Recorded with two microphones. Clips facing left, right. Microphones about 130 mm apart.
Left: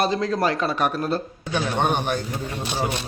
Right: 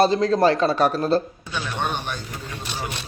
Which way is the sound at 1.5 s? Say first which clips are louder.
Left 5 dB; 50° left (ahead or behind).